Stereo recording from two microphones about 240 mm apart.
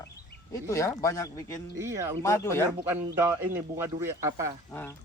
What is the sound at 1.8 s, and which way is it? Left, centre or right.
Speech, centre.